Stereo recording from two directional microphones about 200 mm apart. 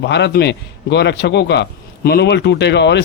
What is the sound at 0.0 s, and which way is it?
Speech, 60° left (ahead or behind).